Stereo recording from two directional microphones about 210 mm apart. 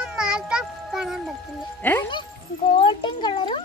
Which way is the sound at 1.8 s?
10° left (ahead or behind).